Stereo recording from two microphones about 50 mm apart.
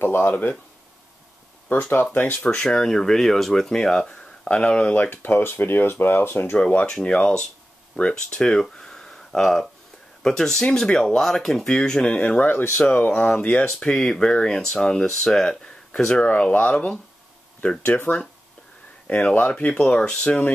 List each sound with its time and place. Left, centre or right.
0.0 s speech: left
1.7 s speech: left
2.4 s speech: centre
4.9 s speech: left
6.6 s speech: left
8.1 s speech: centre; by 13.1 s left
13.1 s speech: centre
13.4 s speech: left
13.7 s speech: centre
16.3 s speech: left
19.5 s speech: centre